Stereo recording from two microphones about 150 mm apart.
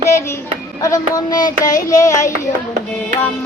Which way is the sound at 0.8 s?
25° left (ahead or behind).